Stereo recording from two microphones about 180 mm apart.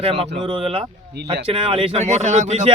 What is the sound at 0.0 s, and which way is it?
Speech, 30° right (ahead or behind).